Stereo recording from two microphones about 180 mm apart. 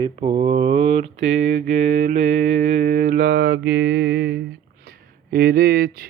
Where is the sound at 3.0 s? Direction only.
55° right (ahead or behind).